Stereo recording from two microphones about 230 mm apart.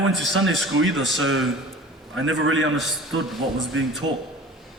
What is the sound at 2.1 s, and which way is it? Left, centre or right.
Speech, right.